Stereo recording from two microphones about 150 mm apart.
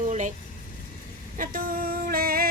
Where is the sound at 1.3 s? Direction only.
65° right (ahead or behind).